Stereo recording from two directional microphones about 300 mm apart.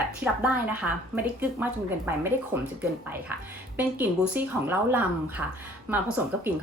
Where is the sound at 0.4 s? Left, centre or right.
Centre.